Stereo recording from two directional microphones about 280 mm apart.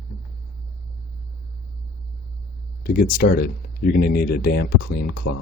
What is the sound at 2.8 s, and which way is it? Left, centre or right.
Speech, left.